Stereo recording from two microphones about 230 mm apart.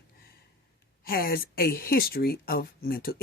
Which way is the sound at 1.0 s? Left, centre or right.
Left.